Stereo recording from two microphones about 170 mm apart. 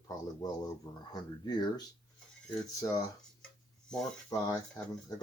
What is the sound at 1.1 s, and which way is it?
Speech, 25° left (ahead or behind).